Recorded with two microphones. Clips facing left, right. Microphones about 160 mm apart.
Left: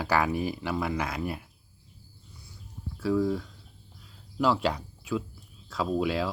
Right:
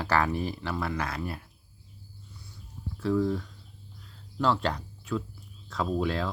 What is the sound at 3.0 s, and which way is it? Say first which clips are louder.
Speech: even; 5° left (ahead or behind).